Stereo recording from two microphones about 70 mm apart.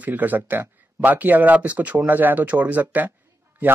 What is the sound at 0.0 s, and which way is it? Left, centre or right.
A man's voice, right.